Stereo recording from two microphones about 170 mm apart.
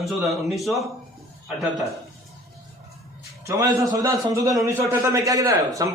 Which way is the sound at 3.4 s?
20° right (ahead or behind).